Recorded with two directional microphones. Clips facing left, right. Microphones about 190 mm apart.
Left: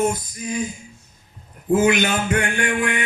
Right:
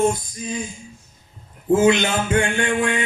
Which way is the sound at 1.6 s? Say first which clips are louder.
Right 1 dB; 25° right (ahead or behind).